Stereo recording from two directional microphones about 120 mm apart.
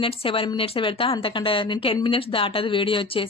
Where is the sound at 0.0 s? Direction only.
50° left (ahead or behind).